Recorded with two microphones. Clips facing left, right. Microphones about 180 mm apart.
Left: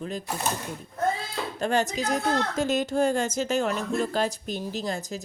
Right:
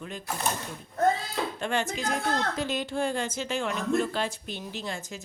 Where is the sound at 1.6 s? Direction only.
40° left (ahead or behind).